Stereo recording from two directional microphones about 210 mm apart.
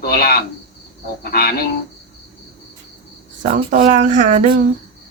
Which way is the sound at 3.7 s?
40° right (ahead or behind).